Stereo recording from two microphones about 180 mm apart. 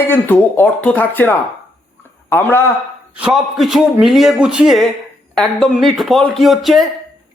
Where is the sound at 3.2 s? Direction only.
5° right (ahead or behind).